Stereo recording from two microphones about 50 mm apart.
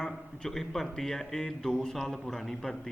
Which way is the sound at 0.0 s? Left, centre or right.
Centre.